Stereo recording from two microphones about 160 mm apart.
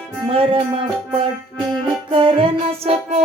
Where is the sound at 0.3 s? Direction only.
35° right (ahead or behind).